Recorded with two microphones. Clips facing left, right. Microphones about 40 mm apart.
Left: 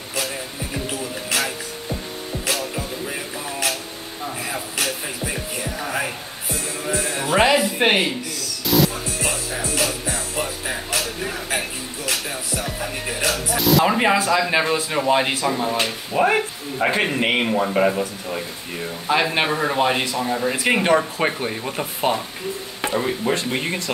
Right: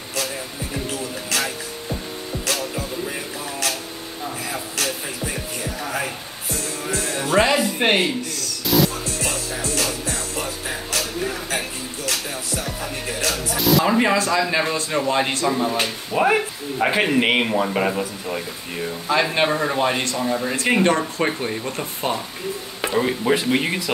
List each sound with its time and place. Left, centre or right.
0.8 s speech: centre
2.4 s music: centre
13.6 s speech: centre
13.8 s speech: centre
19.1 s a man's voice: left
19.5 s speech: centre
22.8 s speech: centre